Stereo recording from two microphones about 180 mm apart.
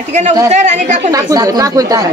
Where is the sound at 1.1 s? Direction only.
20° right (ahead or behind).